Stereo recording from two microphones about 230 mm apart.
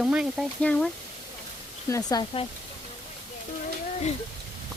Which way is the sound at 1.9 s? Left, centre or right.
Centre.